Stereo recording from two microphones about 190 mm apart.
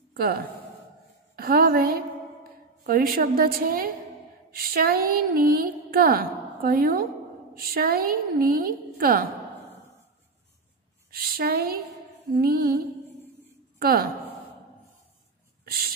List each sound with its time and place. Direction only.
0.1 s a woman's voice: 55° right (ahead or behind)
11.1 s a woman's voice: 50° right (ahead or behind)
15.6 s a sound: 50° right (ahead or behind)